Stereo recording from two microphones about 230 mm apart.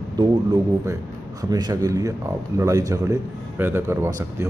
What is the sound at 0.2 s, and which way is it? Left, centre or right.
Speech, centre.